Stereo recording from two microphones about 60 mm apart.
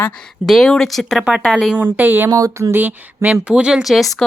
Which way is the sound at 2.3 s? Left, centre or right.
Right.